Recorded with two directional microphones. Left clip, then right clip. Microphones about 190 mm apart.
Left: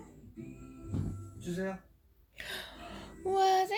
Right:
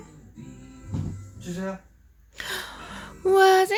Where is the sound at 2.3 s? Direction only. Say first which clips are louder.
Right 9 dB; 25° right (ahead or behind).